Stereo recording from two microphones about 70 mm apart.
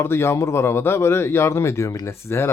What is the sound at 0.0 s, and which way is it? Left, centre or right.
Speech, left.